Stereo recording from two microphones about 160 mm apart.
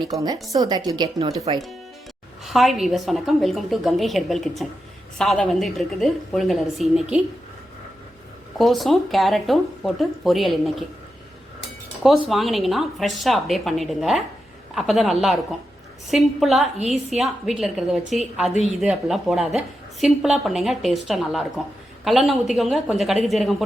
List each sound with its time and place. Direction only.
0.5 s speech: 25° right (ahead or behind)
2.4 s a woman's voice: centre (ahead or behind)
8.5 s a woman's voice: centre (ahead or behind)
12.3 s a woman's voice: centre (ahead or behind)